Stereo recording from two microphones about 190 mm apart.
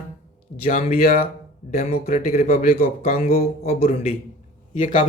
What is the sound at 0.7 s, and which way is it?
Speech, 35° left (ahead or behind).